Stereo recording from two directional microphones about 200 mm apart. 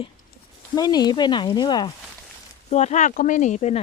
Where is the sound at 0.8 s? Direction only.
20° left (ahead or behind).